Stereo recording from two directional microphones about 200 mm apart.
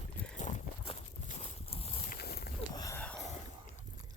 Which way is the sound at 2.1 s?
50° left (ahead or behind).